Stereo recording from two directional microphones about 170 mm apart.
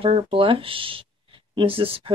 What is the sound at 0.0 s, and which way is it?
Speech, 30° right (ahead or behind).